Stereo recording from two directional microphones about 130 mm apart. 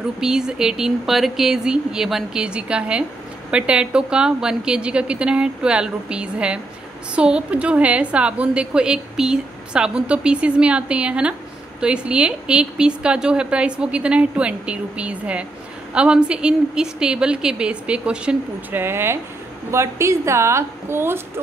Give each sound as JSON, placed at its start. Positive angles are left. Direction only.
{"t": 0.2, "sound": "a woman's voice", "side_deg": -5}